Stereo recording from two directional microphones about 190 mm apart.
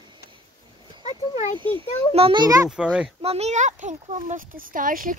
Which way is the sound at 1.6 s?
25° right (ahead or behind).